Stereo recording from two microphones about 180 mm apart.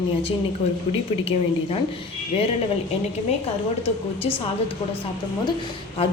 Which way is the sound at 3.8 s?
30° left (ahead or behind).